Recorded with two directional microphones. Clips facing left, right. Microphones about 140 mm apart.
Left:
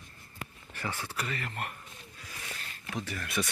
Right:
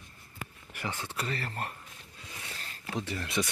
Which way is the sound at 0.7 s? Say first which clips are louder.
Even; 15° right (ahead or behind).